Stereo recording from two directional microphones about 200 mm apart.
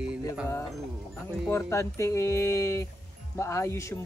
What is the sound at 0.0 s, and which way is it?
Mantra, 5° right (ahead or behind).